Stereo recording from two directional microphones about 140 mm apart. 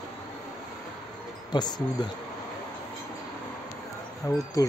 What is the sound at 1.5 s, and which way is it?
Speech, 30° left (ahead or behind).